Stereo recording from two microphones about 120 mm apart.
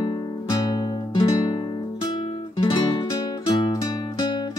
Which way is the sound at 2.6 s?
40° left (ahead or behind).